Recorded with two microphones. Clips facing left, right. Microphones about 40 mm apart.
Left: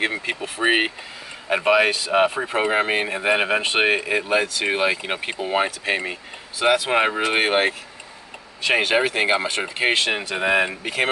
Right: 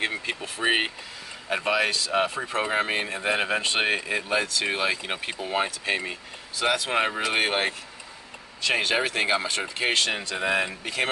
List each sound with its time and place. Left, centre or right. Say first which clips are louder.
0.0 s speech: left 4 dB; centre